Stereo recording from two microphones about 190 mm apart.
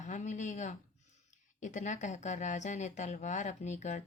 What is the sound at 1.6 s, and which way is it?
Speech, 40° left (ahead or behind).